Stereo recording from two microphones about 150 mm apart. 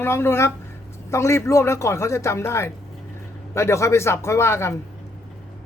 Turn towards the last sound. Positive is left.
turn(degrees=20)  # may be behind; listen again after turning